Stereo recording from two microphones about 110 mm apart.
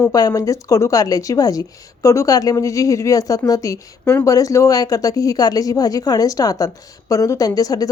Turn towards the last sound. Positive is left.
turn(degrees=35)  # may be behind; listen again after turning